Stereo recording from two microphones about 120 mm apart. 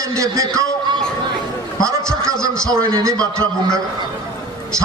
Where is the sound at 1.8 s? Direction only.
25° right (ahead or behind).